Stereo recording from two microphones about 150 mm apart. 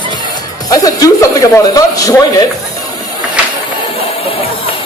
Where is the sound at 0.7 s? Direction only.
25° left (ahead or behind).